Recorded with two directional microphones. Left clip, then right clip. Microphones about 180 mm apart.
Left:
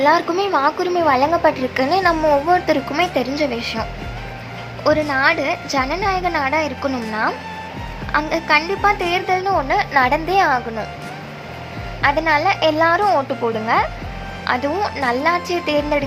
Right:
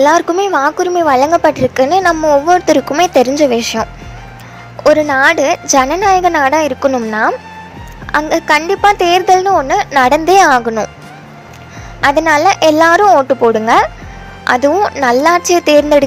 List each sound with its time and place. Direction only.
0.0 s a woman's voice: 45° right (ahead or behind)
11.9 s a woman's voice: 55° right (ahead or behind)